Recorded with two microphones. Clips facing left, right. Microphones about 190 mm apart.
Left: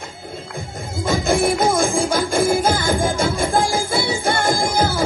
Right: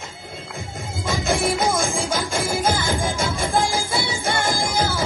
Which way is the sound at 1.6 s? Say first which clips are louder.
Left 5 dB; 55° left (ahead or behind).